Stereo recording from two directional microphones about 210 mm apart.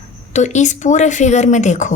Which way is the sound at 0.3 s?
35° left (ahead or behind).